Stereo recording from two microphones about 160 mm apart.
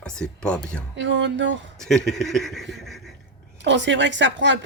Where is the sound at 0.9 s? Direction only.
90° right.